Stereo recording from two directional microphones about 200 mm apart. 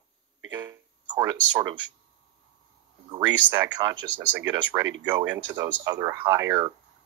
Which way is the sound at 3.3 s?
10° right (ahead or behind).